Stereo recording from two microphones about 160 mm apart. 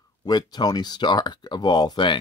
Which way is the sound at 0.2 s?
25° left (ahead or behind).